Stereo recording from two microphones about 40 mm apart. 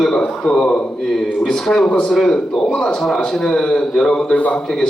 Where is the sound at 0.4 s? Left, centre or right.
Centre.